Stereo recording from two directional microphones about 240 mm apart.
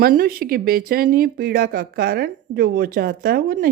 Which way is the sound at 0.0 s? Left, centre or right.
Right.